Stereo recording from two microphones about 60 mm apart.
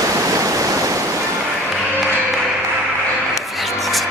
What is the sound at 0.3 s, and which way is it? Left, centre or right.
Stream, right.